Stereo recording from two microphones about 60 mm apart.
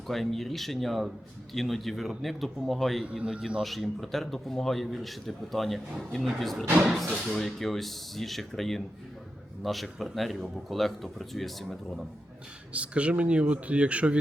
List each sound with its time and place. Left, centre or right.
0.1 s speech: centre
3.0 s a man's voice: centre
3.6 s speech: centre
12.7 s speech: right